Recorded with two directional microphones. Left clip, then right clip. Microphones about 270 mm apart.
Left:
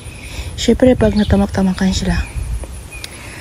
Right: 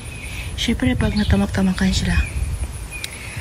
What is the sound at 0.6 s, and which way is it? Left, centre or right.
Speech, centre.